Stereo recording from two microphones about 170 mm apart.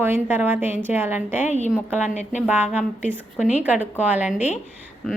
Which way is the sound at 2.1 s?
45° left (ahead or behind).